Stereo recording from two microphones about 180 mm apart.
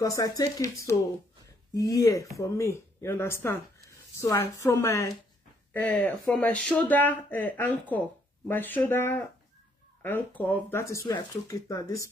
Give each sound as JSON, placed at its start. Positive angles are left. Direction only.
{"t": 0.0, "sound": "speech", "side_deg": 20}